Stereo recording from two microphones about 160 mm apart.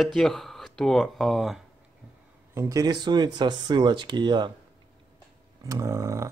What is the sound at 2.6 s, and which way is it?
Speech, 20° right (ahead or behind).